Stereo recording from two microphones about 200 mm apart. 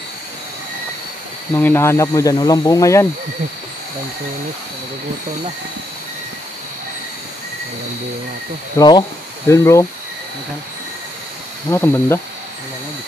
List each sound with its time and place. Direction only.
1.5 s speech: 10° left (ahead or behind)
8.7 s speech: 20° left (ahead or behind)
11.7 s speech: 10° left (ahead or behind)